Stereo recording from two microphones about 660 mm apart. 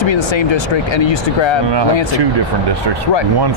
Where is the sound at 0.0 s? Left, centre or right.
Left.